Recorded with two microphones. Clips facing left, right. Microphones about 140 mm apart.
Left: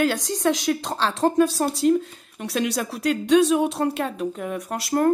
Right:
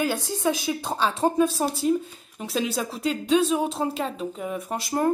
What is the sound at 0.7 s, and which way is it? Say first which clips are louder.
Speech: left 2 dB; 5° right (ahead or behind).